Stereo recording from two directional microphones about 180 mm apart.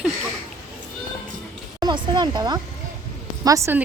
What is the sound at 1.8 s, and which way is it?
A woman's voice, 25° right (ahead or behind).